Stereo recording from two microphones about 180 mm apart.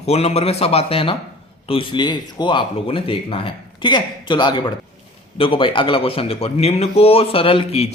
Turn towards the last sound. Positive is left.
turn(degrees=30)  # may be behind; listen again after turning